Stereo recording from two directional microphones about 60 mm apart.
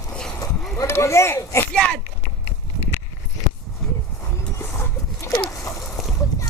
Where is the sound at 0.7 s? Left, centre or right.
Left.